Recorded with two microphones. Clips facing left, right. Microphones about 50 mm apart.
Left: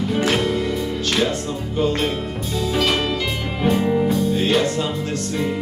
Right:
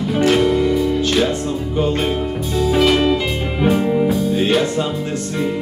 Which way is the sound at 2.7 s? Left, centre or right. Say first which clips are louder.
Right 6 dB; centre.